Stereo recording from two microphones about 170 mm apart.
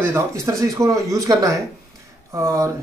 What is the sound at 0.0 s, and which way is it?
Speech, 15° right (ahead or behind).